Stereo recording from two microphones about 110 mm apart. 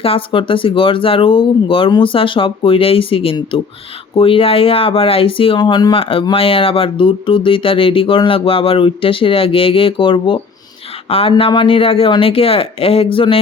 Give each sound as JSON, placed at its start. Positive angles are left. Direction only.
{"t": 0.0, "sound": "speech", "side_deg": 55}